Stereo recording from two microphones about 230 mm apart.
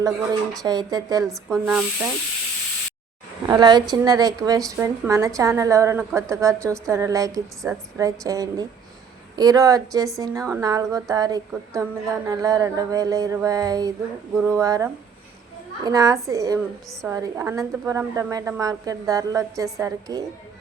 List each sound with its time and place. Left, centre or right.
0.6 s a woman's voice: centre
1.3 s speech: centre
3.4 s a woman's voice: centre